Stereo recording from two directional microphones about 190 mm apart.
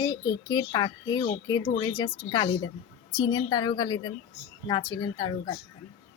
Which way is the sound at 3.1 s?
20° left (ahead or behind).